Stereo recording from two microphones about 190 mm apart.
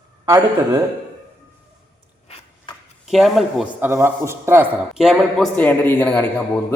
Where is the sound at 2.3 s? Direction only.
30° left (ahead or behind).